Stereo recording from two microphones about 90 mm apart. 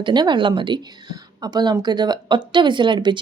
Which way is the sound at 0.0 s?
55° right (ahead or behind).